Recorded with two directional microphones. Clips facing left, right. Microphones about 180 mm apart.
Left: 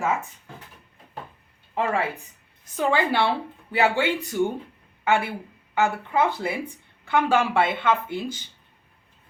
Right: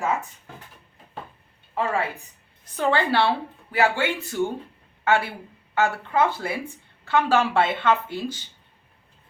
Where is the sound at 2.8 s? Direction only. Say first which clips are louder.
Right 1 dB; 10° left (ahead or behind).